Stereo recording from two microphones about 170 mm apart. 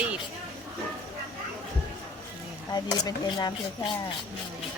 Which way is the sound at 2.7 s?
25° left (ahead or behind).